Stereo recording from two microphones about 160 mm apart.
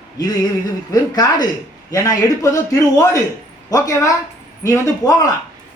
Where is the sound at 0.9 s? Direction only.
25° left (ahead or behind).